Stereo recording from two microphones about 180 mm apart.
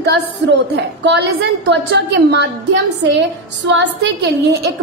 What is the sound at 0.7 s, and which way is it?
A woman's voice, 65° right (ahead or behind).